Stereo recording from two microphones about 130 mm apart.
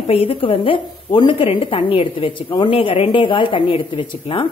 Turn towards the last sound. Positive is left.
turn(degrees=45)  # may be behind; listen again after turning